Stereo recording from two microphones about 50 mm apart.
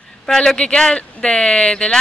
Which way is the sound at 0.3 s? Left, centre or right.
Centre.